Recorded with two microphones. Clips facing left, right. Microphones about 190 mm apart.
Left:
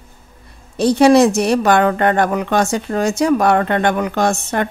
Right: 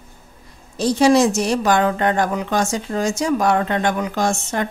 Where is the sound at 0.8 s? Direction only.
60° left (ahead or behind).